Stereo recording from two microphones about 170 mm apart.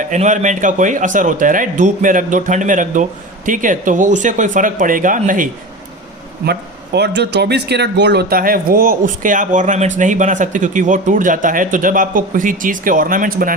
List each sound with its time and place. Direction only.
0.0 s a man's voice: 45° right (ahead or behind)
6.4 s a man's voice: 75° right (ahead or behind); by 13.6 s 55° right (ahead or behind)